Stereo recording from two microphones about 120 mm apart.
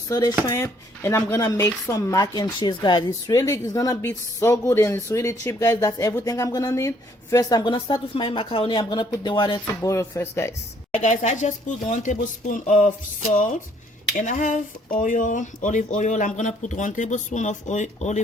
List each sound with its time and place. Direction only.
0.1 s speech: 30° left (ahead or behind)
3.2 s speech: 25° left (ahead or behind)
7.6 s speech: 40° left (ahead or behind)
9.9 s speech: 25° left (ahead or behind)
10.9 s speech: 85° left